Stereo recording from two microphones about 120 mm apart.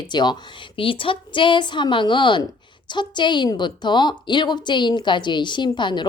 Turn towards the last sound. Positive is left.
turn(degrees=40)  # may be behind; listen again after turning